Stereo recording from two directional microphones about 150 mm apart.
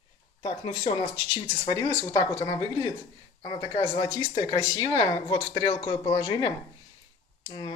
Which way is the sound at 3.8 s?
25° left (ahead or behind).